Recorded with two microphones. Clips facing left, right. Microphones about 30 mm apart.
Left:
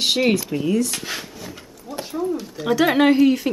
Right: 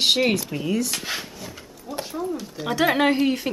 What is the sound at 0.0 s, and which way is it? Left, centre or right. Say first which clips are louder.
Speech: left 1 dB; centre.